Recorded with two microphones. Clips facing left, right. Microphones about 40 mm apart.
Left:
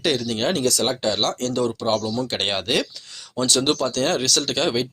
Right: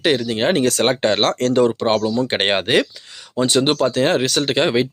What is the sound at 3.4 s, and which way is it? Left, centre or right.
Speech, right.